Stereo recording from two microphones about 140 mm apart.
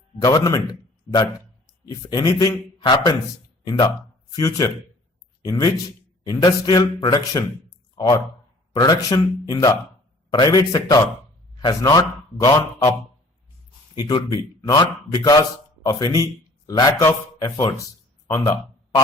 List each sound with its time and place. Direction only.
0.2 s a man's voice: 25° left (ahead or behind)
4.3 s speech: 25° left (ahead or behind)
14.0 s a man's voice: 30° left (ahead or behind)